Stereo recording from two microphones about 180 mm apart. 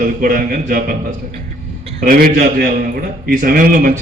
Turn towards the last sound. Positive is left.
turn(degrees=-50)  # may be behind; listen again after turning